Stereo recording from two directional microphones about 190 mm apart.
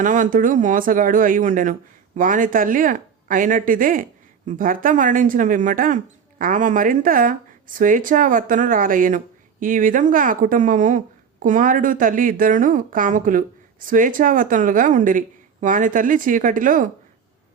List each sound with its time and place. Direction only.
0.0 s speech: 45° right (ahead or behind)